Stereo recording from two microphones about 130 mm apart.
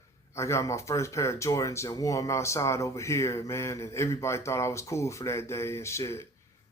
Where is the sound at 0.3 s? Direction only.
20° left (ahead or behind).